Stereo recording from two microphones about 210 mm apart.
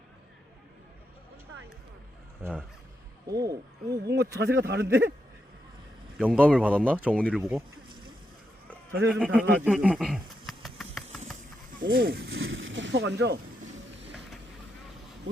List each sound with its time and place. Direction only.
2.4 s speech: 5° right (ahead or behind)
3.2 s speech: 15° right (ahead or behind)
4.0 s a man's voice: 55° right (ahead or behind)
6.1 s speech: 5° right (ahead or behind)
7.1 s speech: 5° left (ahead or behind)
9.1 s a sound: 5° right (ahead or behind)
11.8 s a man's voice: 45° right (ahead or behind)
12.3 s speech: 70° right (ahead or behind)